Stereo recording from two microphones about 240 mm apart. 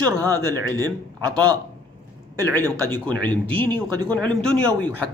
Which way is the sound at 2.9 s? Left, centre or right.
Centre.